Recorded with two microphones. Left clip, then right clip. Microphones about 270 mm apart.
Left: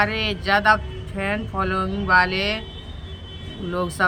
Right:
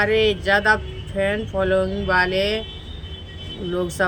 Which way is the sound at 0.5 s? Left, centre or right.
Left.